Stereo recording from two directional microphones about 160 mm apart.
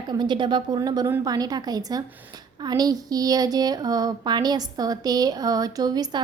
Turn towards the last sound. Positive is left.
turn(degrees=-25)  # may be behind; listen again after turning